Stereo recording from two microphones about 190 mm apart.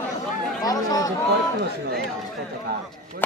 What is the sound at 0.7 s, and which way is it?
Chatter, 20° left (ahead or behind).